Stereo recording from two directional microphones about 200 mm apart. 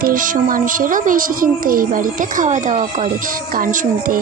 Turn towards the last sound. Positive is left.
turn(degrees=-45)  # may be behind; listen again after turning